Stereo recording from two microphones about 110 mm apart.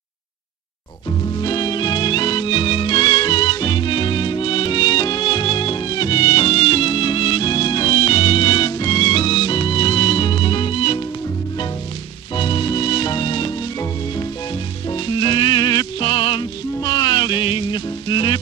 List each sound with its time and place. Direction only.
1.4 s music: 45° left (ahead or behind)
8.7 s music: 35° left (ahead or behind); by 11.0 s 60° left (ahead or behind)
12.4 s music: 45° left (ahead or behind)
14.9 s music: 45° left (ahead or behind)
16.1 s music: 50° left (ahead or behind)
16.8 s music: 35° left (ahead or behind)